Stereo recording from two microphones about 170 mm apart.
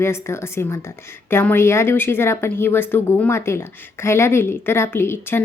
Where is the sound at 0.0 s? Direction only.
15° left (ahead or behind).